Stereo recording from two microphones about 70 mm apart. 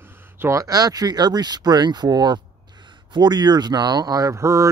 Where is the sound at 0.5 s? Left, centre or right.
Right.